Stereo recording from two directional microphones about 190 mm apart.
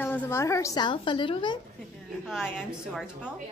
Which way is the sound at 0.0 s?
10° left (ahead or behind).